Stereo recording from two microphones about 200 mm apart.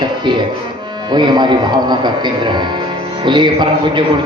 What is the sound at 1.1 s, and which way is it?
A man's voice, 20° right (ahead or behind).